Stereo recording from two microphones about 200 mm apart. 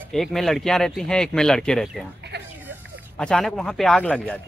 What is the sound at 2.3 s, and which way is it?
Music, 55° right (ahead or behind).